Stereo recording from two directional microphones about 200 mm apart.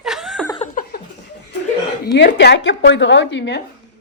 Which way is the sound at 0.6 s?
45° left (ahead or behind).